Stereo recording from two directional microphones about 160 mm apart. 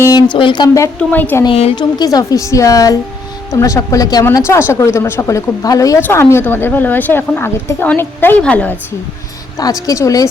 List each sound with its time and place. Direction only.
0.0 s a woman's voice: 25° left (ahead or behind)
0.9 s speech: 10° left (ahead or behind)
1.5 s a woman's voice: 35° left (ahead or behind); by 8.7 s 10° left (ahead or behind)
9.6 s a woman's voice: 20° left (ahead or behind)